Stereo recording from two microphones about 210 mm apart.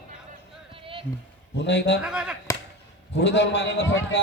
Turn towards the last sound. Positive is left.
turn(degrees=60)  # may be behind; listen again after turning